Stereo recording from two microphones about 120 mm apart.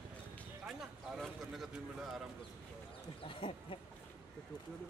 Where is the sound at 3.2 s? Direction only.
50° left (ahead or behind).